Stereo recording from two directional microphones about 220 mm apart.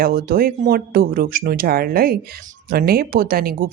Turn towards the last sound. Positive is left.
turn(degrees=-40)  # may be behind; listen again after turning